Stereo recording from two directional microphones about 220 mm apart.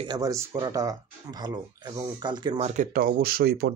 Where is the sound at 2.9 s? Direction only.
40° right (ahead or behind).